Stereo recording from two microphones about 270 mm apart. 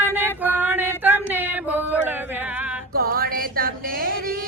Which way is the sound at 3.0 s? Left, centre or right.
Right.